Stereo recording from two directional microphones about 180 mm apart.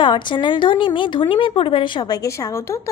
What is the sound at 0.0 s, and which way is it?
A woman's voice, 25° left (ahead or behind).